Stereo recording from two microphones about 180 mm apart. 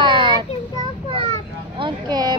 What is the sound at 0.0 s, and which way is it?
Child singing, 25° right (ahead or behind).